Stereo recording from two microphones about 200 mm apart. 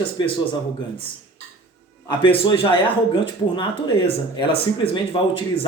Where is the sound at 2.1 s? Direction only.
25° left (ahead or behind).